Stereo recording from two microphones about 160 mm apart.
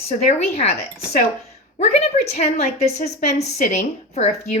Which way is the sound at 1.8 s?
45° left (ahead or behind).